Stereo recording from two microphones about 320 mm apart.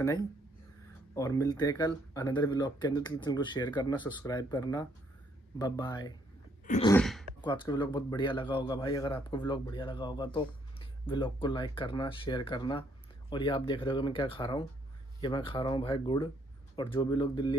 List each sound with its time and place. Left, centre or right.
1.1 s a man's voice: centre
6.6 s sneeze: left
6.9 s speech: centre
7.4 s a man's voice: centre